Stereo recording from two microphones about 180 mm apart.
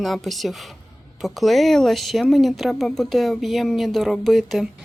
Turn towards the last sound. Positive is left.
turn(degrees=0)  # may be behind; listen again after turning